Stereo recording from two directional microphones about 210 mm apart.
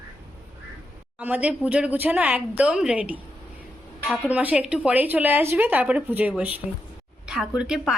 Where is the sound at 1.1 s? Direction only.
5° right (ahead or behind).